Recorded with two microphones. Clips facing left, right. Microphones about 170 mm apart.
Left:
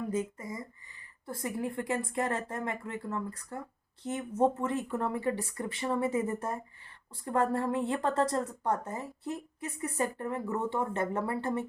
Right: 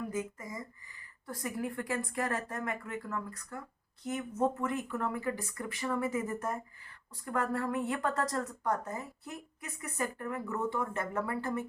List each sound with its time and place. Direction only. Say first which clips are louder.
0.1 s a woman's voice: left 4 dB; 30° left (ahead or behind)